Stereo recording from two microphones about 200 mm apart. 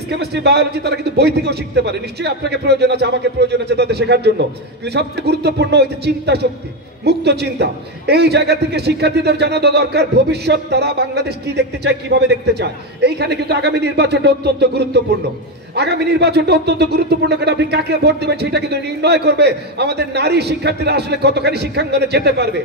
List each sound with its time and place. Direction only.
0.1 s a man's voice: 55° right (ahead or behind)